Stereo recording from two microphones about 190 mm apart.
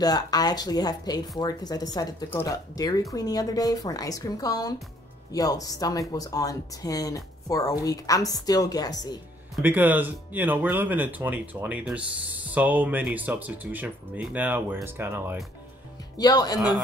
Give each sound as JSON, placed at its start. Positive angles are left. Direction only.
{"t": 0.0, "sound": "speech", "side_deg": 20}
{"t": 9.6, "sound": "speech", "side_deg": -10}
{"t": 16.2, "sound": "speech", "side_deg": 20}